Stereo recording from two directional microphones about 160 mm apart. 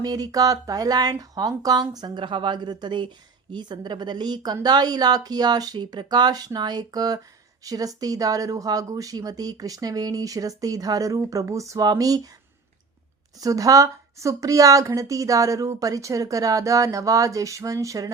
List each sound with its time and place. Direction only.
0.0 s speech: 25° right (ahead or behind)
13.4 s speech: 20° right (ahead or behind)